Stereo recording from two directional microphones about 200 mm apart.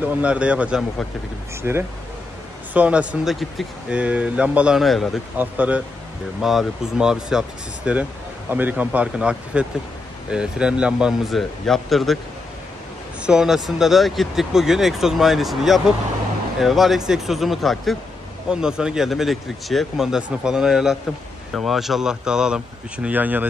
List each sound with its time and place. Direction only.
0.0 s speech: 5° right (ahead or behind)
13.2 s speech: 5° right (ahead or behind)